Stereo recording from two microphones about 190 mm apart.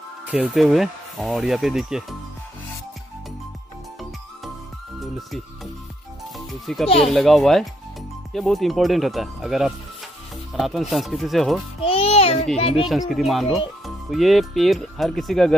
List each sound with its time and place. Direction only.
0.3 s speech: 5° right (ahead or behind)
6.3 s a child's voice: centre (ahead or behind)
11.8 s a child's voice: 30° left (ahead or behind)
13.1 s speech: centre (ahead or behind)